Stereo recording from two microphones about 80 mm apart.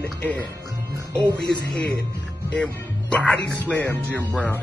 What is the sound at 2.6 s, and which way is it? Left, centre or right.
Speech, centre.